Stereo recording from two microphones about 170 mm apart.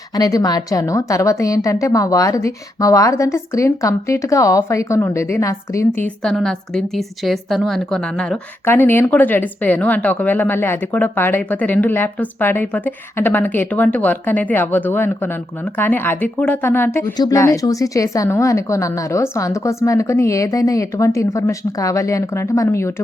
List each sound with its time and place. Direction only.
0.2 s a woman's voice: 20° left (ahead or behind)